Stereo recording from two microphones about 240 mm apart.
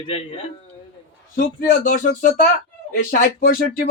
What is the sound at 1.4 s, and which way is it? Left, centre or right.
A man's voice, left.